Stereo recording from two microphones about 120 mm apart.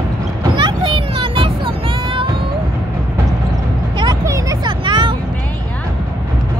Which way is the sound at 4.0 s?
30° right (ahead or behind).